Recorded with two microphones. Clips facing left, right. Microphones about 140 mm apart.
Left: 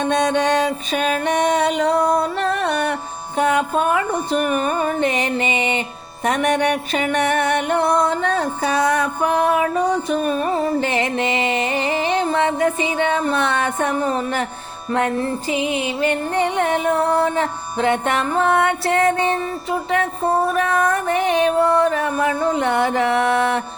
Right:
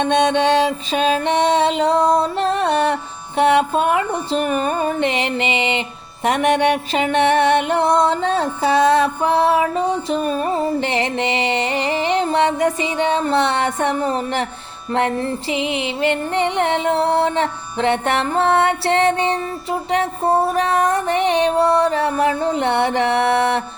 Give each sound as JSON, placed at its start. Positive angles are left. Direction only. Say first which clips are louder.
{"t": 0.0, "sound": "music", "louder": "right 2 dB", "side_deg": -25}